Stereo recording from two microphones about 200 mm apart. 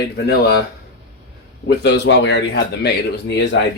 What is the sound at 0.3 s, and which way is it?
Speech, 55° left (ahead or behind).